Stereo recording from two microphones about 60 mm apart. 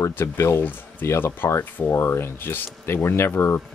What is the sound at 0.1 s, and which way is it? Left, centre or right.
Speech, left.